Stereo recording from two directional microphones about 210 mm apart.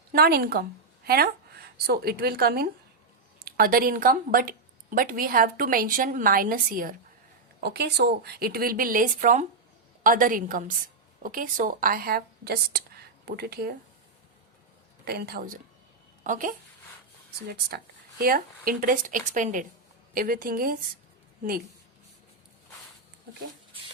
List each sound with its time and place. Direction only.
0.1 s a woman's voice: 45° right (ahead or behind)
15.0 s speech: 50° right (ahead or behind)
18.2 s speech: 45° right (ahead or behind)